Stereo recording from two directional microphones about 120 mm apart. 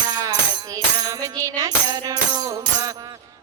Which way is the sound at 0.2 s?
35° right (ahead or behind).